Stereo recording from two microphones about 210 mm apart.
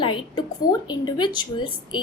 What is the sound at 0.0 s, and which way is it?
A woman's voice, 20° left (ahead or behind).